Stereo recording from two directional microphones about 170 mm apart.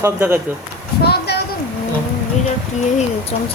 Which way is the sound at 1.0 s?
70° left (ahead or behind).